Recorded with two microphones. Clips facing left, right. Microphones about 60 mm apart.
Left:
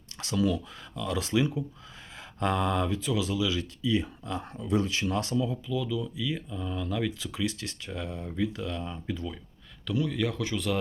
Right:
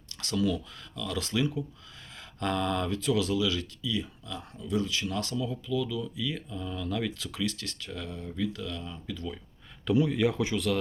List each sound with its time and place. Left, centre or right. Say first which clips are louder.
0.2 s speech: left 1 dB; centre
3.8 s speech: left 5 dB; left
5.6 s speech: even; centre
7.4 s speech: left 1 dB; centre
9.8 s speech: right 4 dB; centre
10.5 s speech: right 1 dB; centre